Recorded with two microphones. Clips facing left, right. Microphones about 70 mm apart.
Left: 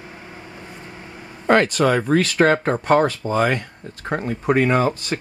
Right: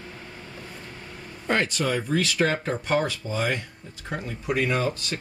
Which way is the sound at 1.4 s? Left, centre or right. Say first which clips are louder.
Left 9 dB; left.